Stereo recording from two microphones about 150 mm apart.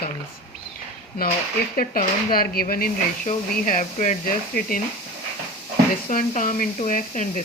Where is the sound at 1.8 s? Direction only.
80° left.